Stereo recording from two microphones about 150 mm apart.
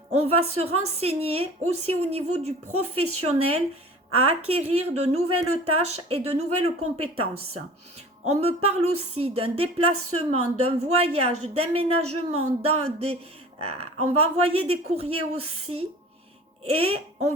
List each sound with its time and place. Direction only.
0.1 s speech: 45° right (ahead or behind)